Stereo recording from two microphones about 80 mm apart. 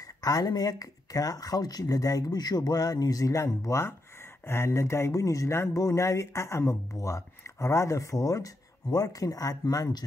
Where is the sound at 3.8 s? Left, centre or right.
Left.